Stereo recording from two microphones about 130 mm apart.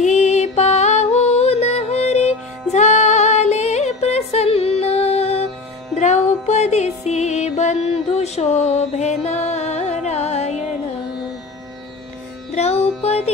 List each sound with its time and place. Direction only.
0.0 s music: 60° left (ahead or behind)
12.5 s music: 55° left (ahead or behind)